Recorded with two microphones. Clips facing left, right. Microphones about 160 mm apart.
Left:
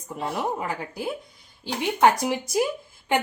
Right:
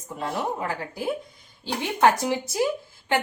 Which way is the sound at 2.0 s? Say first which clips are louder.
Even; 15° left (ahead or behind).